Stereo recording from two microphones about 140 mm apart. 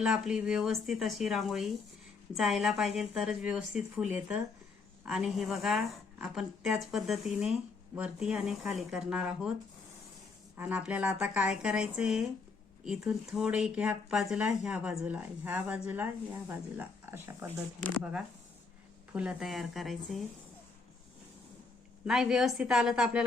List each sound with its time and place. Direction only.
0.0 s a woman's voice: 5° right (ahead or behind)
10.6 s speech: 10° right (ahead or behind)
18.0 s a woman's voice: 5° right (ahead or behind)
22.0 s a woman's voice: 5° right (ahead or behind)